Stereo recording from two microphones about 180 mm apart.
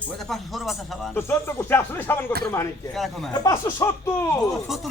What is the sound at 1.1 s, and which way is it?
Speech, 15° left (ahead or behind).